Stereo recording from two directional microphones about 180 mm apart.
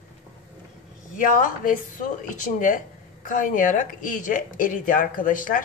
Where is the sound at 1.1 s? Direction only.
50° left (ahead or behind).